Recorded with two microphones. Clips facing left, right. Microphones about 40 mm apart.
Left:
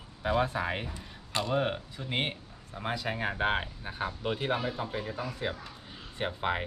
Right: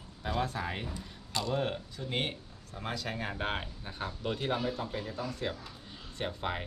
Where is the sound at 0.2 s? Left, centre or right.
Left.